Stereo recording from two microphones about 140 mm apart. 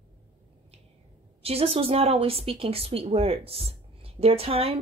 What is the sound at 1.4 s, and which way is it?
A woman's voice, 45° right (ahead or behind).